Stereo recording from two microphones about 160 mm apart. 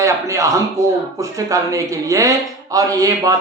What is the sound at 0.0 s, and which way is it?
A man's voice, 20° right (ahead or behind).